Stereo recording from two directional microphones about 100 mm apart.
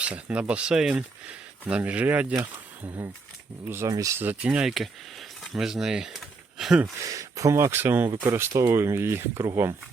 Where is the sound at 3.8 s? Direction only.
35° right (ahead or behind).